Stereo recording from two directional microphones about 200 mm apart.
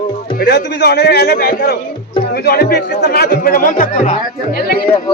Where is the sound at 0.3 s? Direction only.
55° left (ahead or behind).